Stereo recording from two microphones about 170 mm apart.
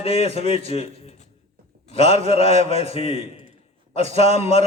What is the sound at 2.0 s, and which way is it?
A man's voice, 35° left (ahead or behind).